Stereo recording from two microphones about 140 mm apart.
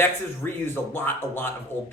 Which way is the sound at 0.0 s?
15° left (ahead or behind).